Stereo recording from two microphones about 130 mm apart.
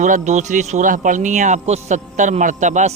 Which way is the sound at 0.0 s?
65° right (ahead or behind).